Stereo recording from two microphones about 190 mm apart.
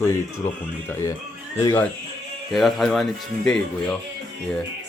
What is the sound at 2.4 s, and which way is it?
Speech, centre (ahead or behind).